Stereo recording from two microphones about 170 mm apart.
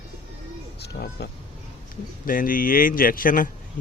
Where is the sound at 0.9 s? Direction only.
80° left.